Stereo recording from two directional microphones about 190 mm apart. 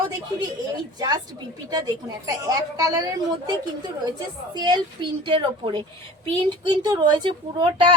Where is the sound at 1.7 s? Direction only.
20° right (ahead or behind).